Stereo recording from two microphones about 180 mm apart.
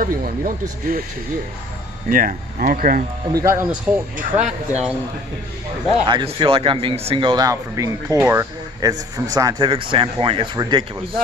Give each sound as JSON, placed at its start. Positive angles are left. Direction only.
{"t": 0.0, "sound": "speech", "side_deg": -50}
{"t": 2.0, "sound": "speech", "side_deg": -50}
{"t": 3.3, "sound": "speech", "side_deg": -15}
{"t": 4.2, "sound": "speech", "side_deg": -40}
{"t": 6.0, "sound": "a man's voice", "side_deg": -25}